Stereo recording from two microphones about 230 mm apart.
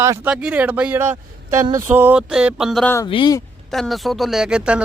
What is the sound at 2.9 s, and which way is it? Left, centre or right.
Speech, centre.